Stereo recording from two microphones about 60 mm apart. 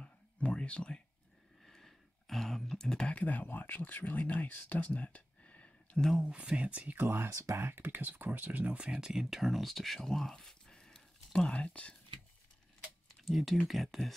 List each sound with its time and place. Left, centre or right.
0.0 s whispering: centre
1.6 s a sound: centre
3.1 s speech: left
6.2 s speech: centre
7.0 s speech: right
7.2 s speech: right
7.5 s speech: right
8.9 s speech: centre
13.2 s speech: centre